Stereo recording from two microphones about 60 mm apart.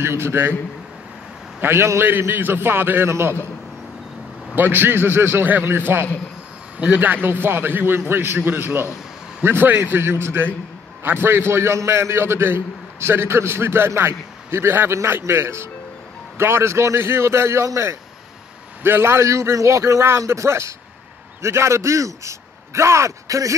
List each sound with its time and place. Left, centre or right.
0.0 s a man's voice: right
1.6 s a man's voice: right
4.6 s a man's voice: right
6.8 s a man's voice: right
18.8 s a man's voice: right